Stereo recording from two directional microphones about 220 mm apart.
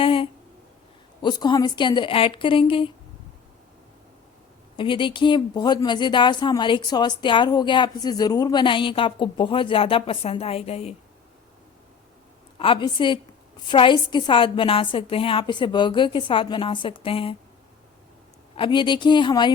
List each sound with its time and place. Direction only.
0.0 s a sound: 25° left (ahead or behind)
1.2 s speech: 20° left (ahead or behind)
4.8 s speech: 20° left (ahead or behind)
12.5 s speech: 25° left (ahead or behind)
18.5 s speech: 20° left (ahead or behind)